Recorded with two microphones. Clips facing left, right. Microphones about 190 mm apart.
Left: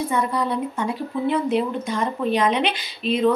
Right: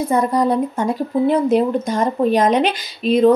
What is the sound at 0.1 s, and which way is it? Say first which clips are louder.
Speech: right 7 dB; 40° right (ahead or behind).